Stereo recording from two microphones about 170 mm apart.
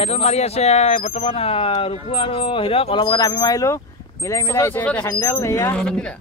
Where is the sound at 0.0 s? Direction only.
35° left (ahead or behind); by 5.8 s 15° left (ahead or behind).